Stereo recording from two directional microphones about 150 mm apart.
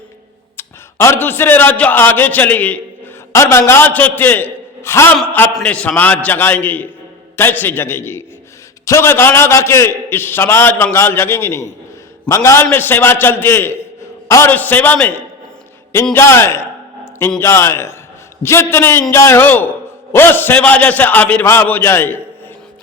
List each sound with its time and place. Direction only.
0.5 s a man's voice: 15° left (ahead or behind)
16.1 s a man's voice: 15° left (ahead or behind)